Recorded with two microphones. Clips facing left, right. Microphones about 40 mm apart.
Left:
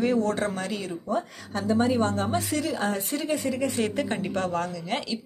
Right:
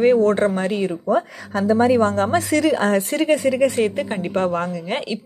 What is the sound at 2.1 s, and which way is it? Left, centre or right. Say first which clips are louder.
A woman's voice: right 8 dB; right.